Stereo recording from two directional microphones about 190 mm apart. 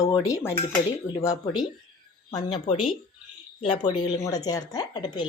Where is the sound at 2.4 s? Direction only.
40° left (ahead or behind).